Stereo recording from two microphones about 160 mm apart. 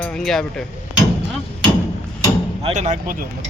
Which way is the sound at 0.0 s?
Centre (ahead or behind).